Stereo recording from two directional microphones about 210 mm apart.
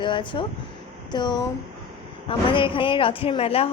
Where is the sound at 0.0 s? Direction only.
20° left (ahead or behind).